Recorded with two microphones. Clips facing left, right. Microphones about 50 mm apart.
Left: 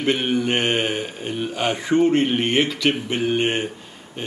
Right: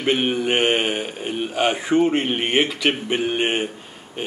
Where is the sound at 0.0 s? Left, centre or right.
Centre.